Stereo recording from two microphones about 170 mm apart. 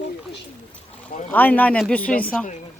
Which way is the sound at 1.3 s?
10° left (ahead or behind).